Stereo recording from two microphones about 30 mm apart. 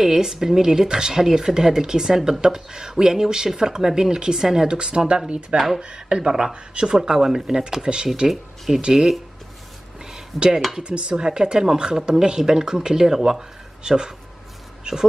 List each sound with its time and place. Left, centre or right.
0.0 s speech: centre
4.6 s speech: right
6.2 s speech: right
6.5 s speech: right
6.9 s speech: centre
8.3 s speech: centre
10.3 s speech: centre
10.8 s speech: right